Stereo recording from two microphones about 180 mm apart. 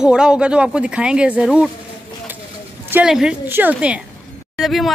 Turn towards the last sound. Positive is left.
turn(degrees=0)  # may be behind; listen again after turning